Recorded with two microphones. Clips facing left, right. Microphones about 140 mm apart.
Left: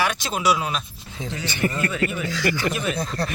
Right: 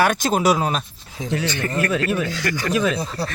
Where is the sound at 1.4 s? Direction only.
10° left (ahead or behind).